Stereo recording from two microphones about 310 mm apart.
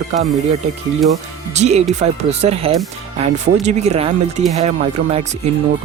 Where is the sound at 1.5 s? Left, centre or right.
Right.